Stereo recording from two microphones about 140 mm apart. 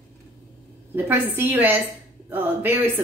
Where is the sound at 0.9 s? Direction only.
15° right (ahead or behind).